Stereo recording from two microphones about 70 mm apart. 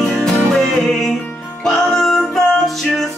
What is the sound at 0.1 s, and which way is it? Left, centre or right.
Music, centre.